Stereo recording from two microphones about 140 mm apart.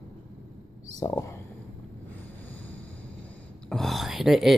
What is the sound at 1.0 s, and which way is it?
Speech, 25° left (ahead or behind).